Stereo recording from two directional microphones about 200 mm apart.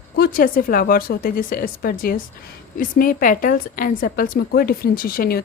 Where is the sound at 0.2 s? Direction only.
45° left (ahead or behind).